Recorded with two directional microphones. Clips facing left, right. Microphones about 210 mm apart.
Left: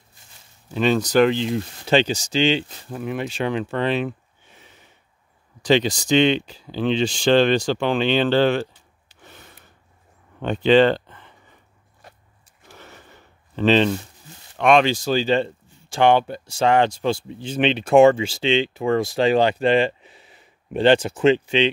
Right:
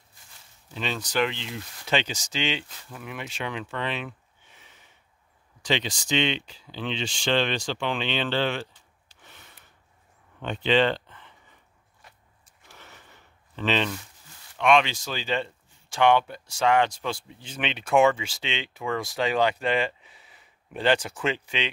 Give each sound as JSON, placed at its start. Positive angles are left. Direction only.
{"t": 0.7, "sound": "speech", "side_deg": 45}
{"t": 9.2, "sound": "a sound", "side_deg": 40}
{"t": 10.4, "sound": "speech", "side_deg": 40}
{"t": 12.0, "sound": "vehicle", "side_deg": 40}
{"t": 12.6, "sound": "a sound", "side_deg": 40}
{"t": 14.6, "sound": "speech", "side_deg": 40}